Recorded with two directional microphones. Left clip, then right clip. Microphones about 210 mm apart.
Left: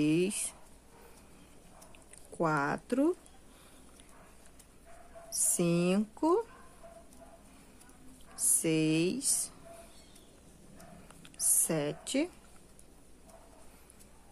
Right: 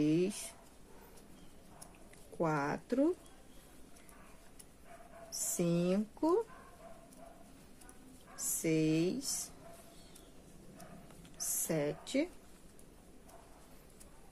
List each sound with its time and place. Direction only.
0.0 s speech: 15° left (ahead or behind)
2.3 s speech: 15° left (ahead or behind)
5.4 s speech: 15° left (ahead or behind)
8.4 s speech: 15° left (ahead or behind)
11.5 s a woman's voice: 15° left (ahead or behind)